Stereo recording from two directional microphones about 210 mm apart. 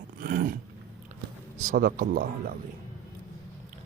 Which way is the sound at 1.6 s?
40° right (ahead or behind).